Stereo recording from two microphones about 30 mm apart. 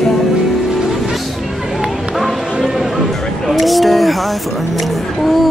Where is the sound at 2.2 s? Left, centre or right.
Centre.